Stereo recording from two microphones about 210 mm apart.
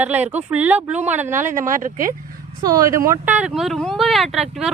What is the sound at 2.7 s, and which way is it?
Speech, 15° right (ahead or behind).